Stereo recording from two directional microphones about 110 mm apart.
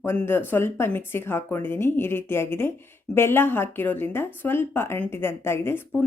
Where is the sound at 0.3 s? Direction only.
20° left (ahead or behind).